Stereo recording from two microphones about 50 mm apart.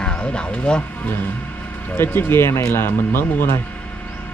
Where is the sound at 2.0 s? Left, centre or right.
Left.